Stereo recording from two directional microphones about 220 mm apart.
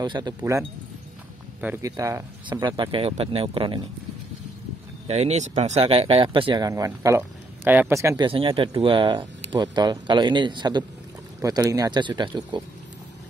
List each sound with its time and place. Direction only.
0.0 s speech: 20° right (ahead or behind)
0.4 s speech: 10° right (ahead or behind)
5.0 s speech: 30° right (ahead or behind)